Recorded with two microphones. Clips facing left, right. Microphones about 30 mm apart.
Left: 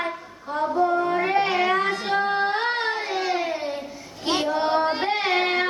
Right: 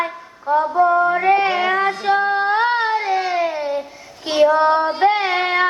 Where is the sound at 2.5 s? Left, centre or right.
Centre.